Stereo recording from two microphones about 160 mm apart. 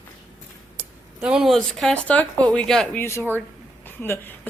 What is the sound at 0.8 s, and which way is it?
Speech, 5° right (ahead or behind).